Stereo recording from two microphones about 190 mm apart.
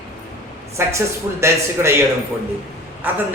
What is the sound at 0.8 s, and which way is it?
A woman's voice, 15° right (ahead or behind).